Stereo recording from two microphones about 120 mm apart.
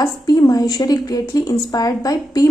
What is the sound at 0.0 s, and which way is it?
Speech, 30° left (ahead or behind).